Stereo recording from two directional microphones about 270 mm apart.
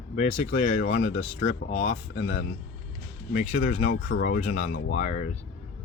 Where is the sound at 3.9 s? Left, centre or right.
Left.